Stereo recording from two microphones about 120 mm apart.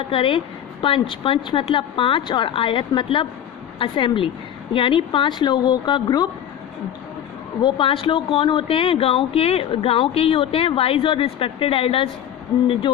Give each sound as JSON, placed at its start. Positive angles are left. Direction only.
{"t": 0.1, "sound": "speech", "side_deg": 45}
{"t": 7.6, "sound": "speech", "side_deg": 45}